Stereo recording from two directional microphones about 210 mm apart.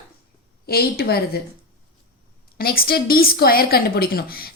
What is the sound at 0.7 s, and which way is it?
Speech, 45° left (ahead or behind).